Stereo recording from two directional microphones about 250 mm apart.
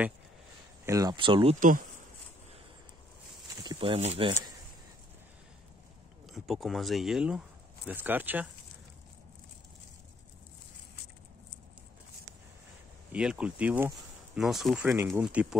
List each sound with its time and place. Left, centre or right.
0.8 s speech: centre; by 1.9 s right
3.6 s speech: right
6.2 s speech: centre
13.1 s speech: centre